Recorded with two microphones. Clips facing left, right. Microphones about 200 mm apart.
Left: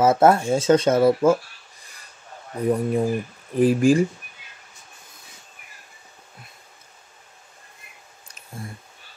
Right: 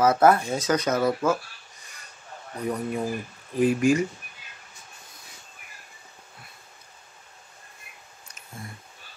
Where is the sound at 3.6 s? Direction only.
30° left (ahead or behind).